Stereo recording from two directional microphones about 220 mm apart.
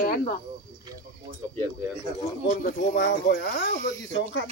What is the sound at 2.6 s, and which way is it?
Speech, 50° left (ahead or behind).